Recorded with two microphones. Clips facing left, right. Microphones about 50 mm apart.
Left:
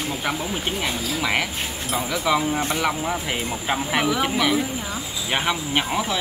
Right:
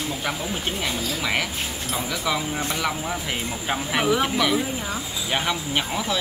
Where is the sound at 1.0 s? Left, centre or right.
Centre.